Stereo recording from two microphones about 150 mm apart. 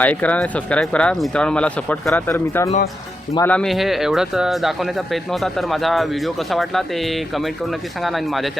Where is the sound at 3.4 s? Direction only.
5° left (ahead or behind).